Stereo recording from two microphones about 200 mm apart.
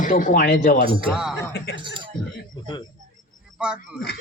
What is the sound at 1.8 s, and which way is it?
Speech, 25° right (ahead or behind).